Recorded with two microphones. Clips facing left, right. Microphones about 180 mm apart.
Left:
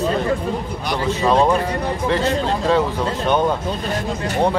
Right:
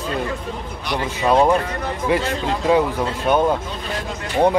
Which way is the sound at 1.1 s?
10° right (ahead or behind).